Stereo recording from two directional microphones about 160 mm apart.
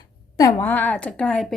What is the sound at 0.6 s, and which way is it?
Speech, 10° left (ahead or behind).